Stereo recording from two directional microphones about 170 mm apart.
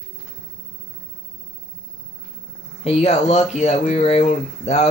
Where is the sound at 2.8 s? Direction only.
40° left (ahead or behind).